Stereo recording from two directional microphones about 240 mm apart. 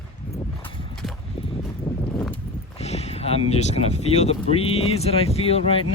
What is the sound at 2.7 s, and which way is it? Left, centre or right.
Speech, left.